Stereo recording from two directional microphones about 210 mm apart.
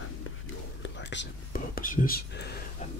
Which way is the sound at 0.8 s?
60° left (ahead or behind).